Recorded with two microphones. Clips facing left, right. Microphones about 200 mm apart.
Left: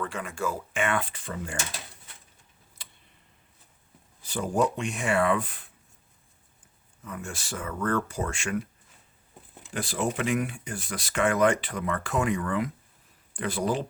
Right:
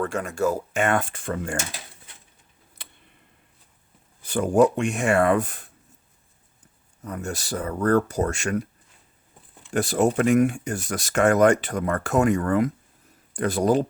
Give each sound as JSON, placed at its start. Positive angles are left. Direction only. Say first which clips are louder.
{"t": 0.0, "sound": "speech", "louder": "right 7 dB", "side_deg": -45}
{"t": 4.2, "sound": "speech", "louder": "right 8 dB", "side_deg": -55}
{"t": 7.0, "sound": "speech", "louder": "right 7 dB", "side_deg": -40}
{"t": 9.7, "sound": "speech", "louder": "right 8 dB", "side_deg": -45}